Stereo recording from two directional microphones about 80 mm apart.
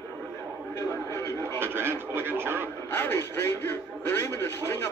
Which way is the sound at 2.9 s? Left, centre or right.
Left.